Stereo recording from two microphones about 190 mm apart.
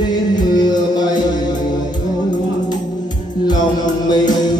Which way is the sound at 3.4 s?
20° left (ahead or behind).